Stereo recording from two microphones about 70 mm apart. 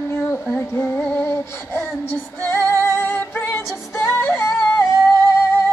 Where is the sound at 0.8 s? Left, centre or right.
Left.